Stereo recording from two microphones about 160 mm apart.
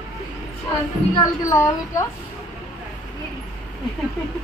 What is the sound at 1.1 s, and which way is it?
Speech, 20° left (ahead or behind).